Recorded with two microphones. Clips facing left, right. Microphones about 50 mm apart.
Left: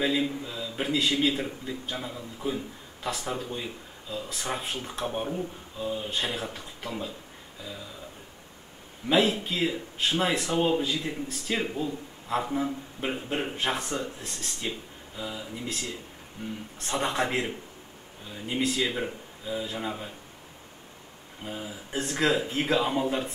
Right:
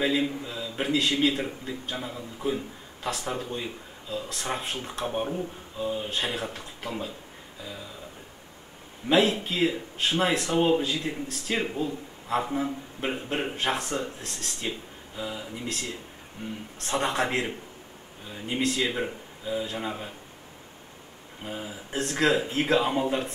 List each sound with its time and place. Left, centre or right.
0.0 s a man's voice: centre
9.1 s a man's voice: centre
16.4 s speech: right
16.8 s a man's voice: centre
21.4 s a man's voice: centre